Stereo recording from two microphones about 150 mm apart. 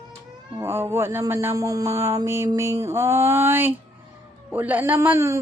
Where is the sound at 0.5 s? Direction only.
15° right (ahead or behind).